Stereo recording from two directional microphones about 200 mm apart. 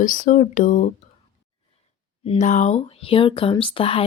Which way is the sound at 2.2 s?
35° left (ahead or behind).